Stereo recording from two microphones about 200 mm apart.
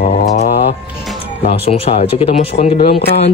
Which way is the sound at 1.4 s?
30° left (ahead or behind).